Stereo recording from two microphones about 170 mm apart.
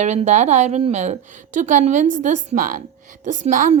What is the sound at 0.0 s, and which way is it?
A woman's voice, 45° right (ahead or behind).